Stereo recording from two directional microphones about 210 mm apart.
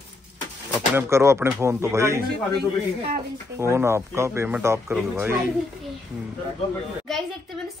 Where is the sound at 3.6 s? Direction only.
10° right (ahead or behind).